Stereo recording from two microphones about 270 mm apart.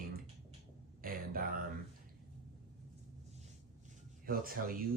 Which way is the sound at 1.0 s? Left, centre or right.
Right.